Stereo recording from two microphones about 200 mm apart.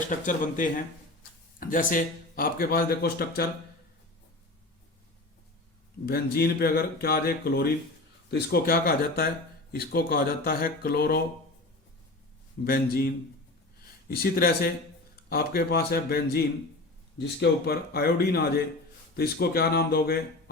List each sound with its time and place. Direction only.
0.1 s speech: 40° left (ahead or behind)
6.1 s speech: 50° left (ahead or behind)
12.6 s speech: 50° left (ahead or behind)